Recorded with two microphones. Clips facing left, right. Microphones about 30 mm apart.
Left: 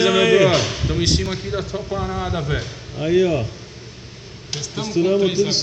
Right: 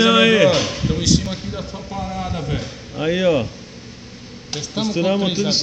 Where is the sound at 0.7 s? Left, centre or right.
Left.